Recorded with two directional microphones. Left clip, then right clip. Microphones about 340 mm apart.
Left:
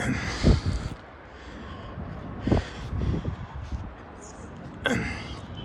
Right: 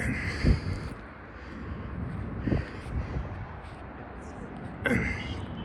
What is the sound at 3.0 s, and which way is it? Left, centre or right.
Vehicle, centre.